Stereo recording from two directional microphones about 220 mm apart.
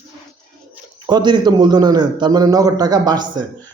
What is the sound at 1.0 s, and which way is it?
A man's voice, 20° right (ahead or behind).